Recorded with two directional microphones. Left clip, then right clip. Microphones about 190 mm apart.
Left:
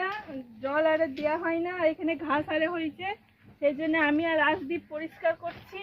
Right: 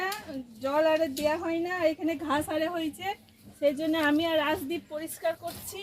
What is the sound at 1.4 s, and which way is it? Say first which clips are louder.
A woman's voice: left 1 dB; 15° right (ahead or behind).